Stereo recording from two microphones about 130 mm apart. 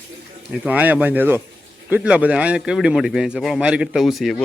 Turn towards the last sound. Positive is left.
turn(degrees=0)  # may be behind; listen again after turning